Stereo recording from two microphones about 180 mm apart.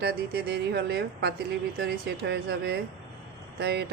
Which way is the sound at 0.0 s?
60° right (ahead or behind).